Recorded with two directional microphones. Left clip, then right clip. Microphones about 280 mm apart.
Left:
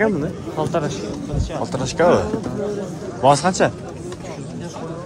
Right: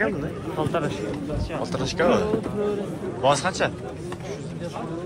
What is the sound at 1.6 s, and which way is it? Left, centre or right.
A man's voice, left.